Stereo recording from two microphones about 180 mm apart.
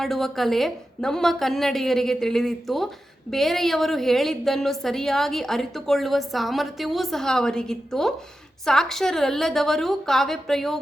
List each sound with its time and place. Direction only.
0.0 s a woman's voice: centre (ahead or behind)